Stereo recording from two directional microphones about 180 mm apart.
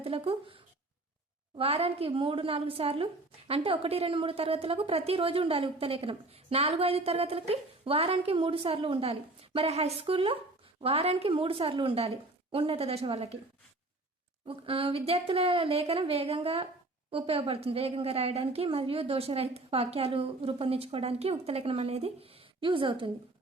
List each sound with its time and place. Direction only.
0.0 s a woman's voice: 30° right (ahead or behind)
14.4 s a woman's voice: 30° right (ahead or behind)